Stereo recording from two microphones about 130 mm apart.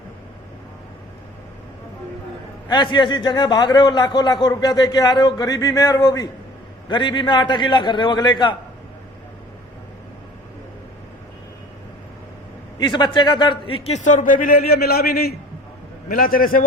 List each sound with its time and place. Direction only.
2.6 s a man's voice: 35° left (ahead or behind)
12.8 s a man's voice: 35° left (ahead or behind); by 14.6 s 90° left
16.0 s a man's voice: 90° left